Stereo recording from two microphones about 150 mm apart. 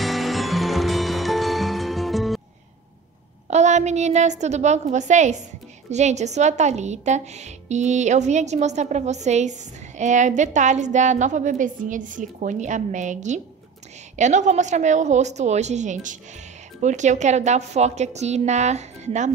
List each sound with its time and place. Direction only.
0.0 s music: centre (ahead or behind)
3.4 s a woman's voice: 50° right (ahead or behind)